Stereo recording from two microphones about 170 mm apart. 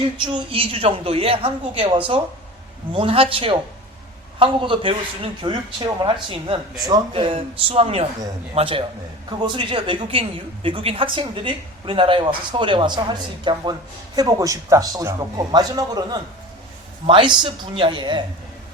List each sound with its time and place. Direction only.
0.2 s a woman's voice: 30° right (ahead or behind)